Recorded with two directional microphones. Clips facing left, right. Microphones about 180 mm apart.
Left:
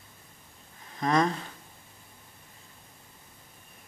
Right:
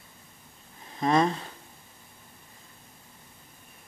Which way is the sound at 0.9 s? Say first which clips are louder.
Right 2 dB; 25° right (ahead or behind).